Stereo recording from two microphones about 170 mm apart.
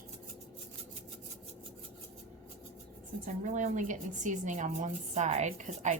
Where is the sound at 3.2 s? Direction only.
45° right (ahead or behind).